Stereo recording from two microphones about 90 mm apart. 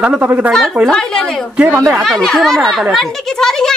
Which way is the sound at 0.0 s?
15° right (ahead or behind).